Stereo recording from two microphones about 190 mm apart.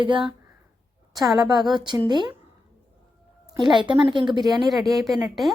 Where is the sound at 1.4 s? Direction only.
20° right (ahead or behind).